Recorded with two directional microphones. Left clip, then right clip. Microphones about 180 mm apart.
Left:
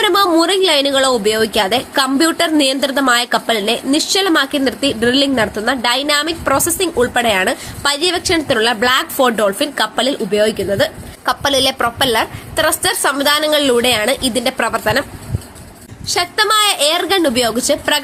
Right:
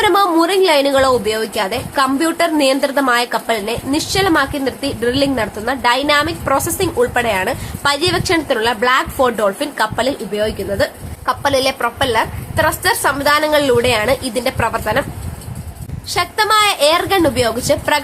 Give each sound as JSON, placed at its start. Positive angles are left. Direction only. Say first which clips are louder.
{"t": 0.0, "sound": "speech", "louder": "even", "side_deg": 15}
{"t": 16.0, "sound": "a woman's voice", "louder": "left 1 dB", "side_deg": 15}